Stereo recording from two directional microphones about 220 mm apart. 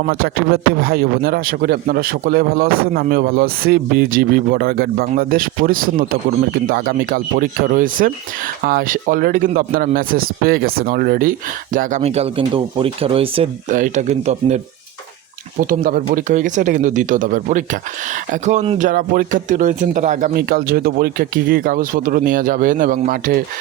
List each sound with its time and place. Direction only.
0.1 s a man's voice: 45° right (ahead or behind); by 13.5 s 25° right (ahead or behind)
13.7 s speech: 35° right (ahead or behind)
15.7 s speech: 40° right (ahead or behind)